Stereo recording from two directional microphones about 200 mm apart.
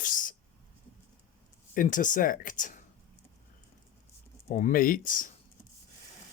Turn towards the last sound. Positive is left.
turn(degrees=40)  # may be behind; listen again after turning